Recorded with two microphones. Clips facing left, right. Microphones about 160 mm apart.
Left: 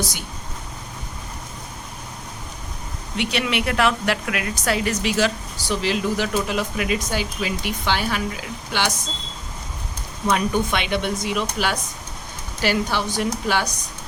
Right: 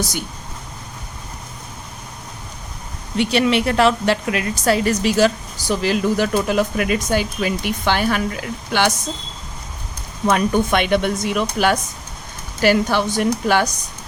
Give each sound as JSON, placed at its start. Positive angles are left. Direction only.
{"t": 3.2, "sound": "a woman's voice", "side_deg": -35}
{"t": 10.2, "sound": "a woman's voice", "side_deg": -50}